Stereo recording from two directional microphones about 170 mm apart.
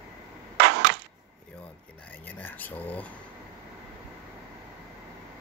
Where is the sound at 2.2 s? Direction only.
10° left (ahead or behind).